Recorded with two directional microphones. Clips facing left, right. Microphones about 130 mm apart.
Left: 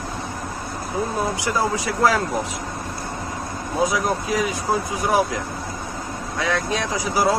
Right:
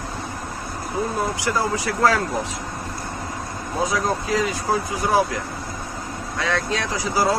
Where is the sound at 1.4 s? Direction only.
20° left (ahead or behind).